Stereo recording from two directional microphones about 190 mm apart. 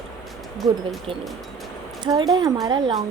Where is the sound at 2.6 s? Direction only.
25° right (ahead or behind).